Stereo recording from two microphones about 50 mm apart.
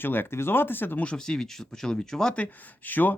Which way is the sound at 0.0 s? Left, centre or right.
Left.